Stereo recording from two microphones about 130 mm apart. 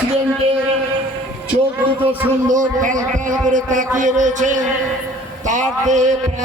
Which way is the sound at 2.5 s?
85° right.